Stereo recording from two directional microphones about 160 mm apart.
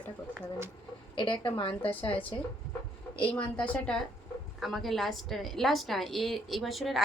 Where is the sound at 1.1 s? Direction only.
30° left (ahead or behind).